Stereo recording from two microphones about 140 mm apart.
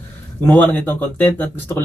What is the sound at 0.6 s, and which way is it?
Speech, 15° left (ahead or behind).